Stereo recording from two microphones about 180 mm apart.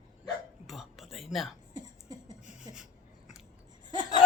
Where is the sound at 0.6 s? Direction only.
Centre (ahead or behind).